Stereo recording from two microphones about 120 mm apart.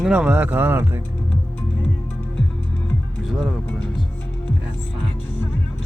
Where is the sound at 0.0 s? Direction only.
5° right (ahead or behind).